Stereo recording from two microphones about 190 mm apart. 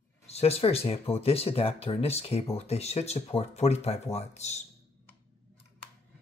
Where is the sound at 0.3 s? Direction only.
30° left (ahead or behind).